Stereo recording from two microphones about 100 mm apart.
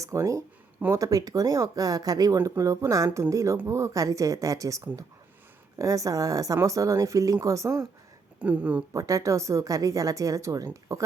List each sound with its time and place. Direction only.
0.0 s a woman's voice: 30° right (ahead or behind)
5.8 s a woman's voice: 35° right (ahead or behind)
8.4 s speech: 15° right (ahead or behind)
8.9 s a woman's voice: 35° right (ahead or behind)